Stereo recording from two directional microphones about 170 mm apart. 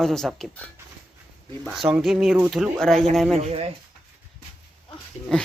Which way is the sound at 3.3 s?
40° right (ahead or behind).